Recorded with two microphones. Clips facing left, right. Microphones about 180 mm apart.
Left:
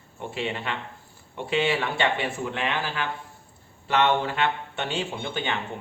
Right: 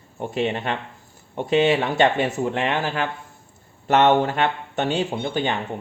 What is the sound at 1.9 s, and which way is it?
Speech, 45° right (ahead or behind).